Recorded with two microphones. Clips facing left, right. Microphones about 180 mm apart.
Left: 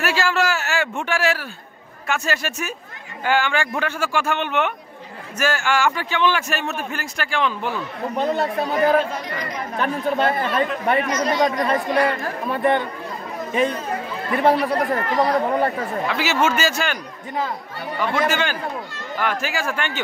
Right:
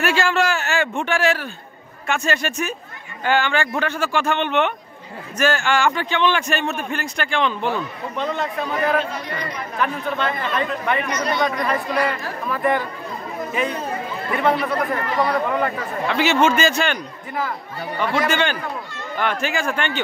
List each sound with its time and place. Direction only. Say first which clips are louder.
0.0 s a man's voice: right 1 dB; 5° left (ahead or behind)
8.2 s a man's voice: left 3 dB; 40° left (ahead or behind)
12.4 s a man's voice: left 1 dB; 25° left (ahead or behind)
16.1 s a man's voice: right 5 dB; 5° left (ahead or behind)
18.1 s a man's voice: right 1 dB; 5° left (ahead or behind)